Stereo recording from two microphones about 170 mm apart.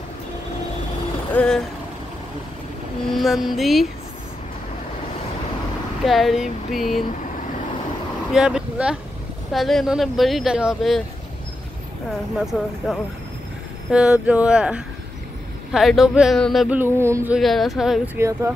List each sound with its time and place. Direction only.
1.3 s vehicle: 5° left (ahead or behind)
3.1 s speech: centre (ahead or behind)
6.0 s speech: centre (ahead or behind)
8.3 s speech: 5° right (ahead or behind)
12.5 s speech: centre (ahead or behind)
16.7 s a sound: 15° right (ahead or behind)
17.4 s speech: centre (ahead or behind)
18.1 s a sound: 15° right (ahead or behind)